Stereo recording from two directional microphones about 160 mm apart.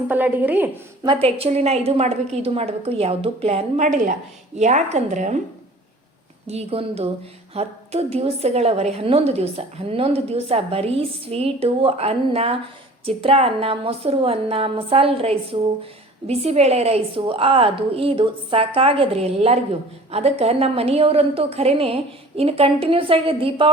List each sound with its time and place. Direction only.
0.1 s a woman's voice: 10° right (ahead or behind)
1.0 s a woman's voice: 35° right (ahead or behind)
6.5 s a woman's voice: 40° right (ahead or behind)